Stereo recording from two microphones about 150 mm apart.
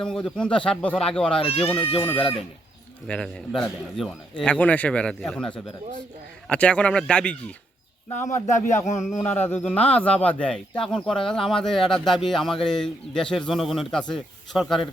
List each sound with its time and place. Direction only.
0.0 s a man's voice: 5° left (ahead or behind)
1.4 s speech: 40° left (ahead or behind)
1.6 s a man's voice: 10° left (ahead or behind)
8.4 s speech: 55° left (ahead or behind)
9.1 s a man's voice: 15° left (ahead or behind)